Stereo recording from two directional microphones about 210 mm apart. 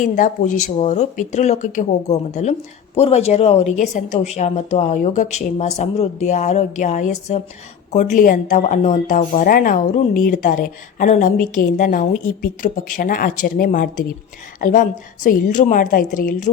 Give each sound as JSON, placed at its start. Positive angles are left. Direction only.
{"t": 0.0, "sound": "speech", "side_deg": 35}